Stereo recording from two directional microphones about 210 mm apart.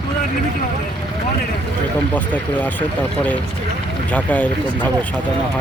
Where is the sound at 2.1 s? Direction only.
10° left (ahead or behind).